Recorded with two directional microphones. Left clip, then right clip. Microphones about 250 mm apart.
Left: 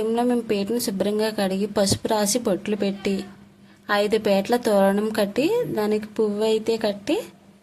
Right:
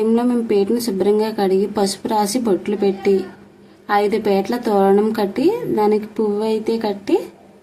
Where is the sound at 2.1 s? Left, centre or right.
Left.